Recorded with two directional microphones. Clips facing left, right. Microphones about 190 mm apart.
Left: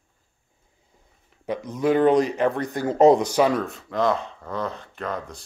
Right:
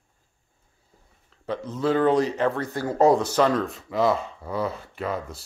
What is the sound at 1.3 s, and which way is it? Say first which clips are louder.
Speech: left 1 dB; 15° left (ahead or behind).